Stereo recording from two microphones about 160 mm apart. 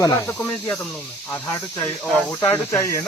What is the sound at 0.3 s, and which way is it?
Speech, 5° left (ahead or behind).